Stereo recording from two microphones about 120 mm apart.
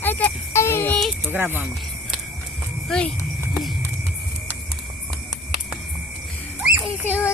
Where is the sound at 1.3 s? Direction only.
15° right (ahead or behind).